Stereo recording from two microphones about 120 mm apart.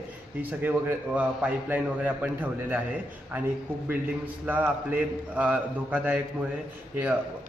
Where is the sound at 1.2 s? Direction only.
10° right (ahead or behind).